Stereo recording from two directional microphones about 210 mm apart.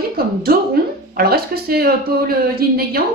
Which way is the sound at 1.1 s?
45° right (ahead or behind).